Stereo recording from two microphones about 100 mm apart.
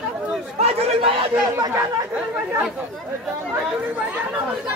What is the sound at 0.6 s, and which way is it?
Chatter, 85° right.